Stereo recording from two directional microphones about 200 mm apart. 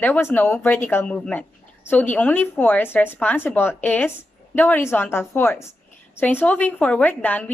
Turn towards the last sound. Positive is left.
turn(degrees=10)  # may be behind; listen again after turning